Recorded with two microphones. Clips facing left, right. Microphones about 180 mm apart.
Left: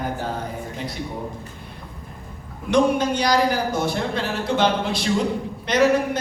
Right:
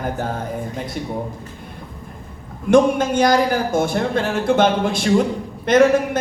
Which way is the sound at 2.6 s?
50° right (ahead or behind).